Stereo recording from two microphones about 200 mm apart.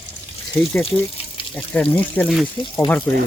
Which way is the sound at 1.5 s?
5° left (ahead or behind).